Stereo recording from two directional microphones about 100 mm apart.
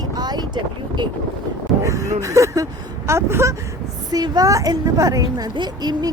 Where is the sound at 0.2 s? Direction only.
45° right (ahead or behind).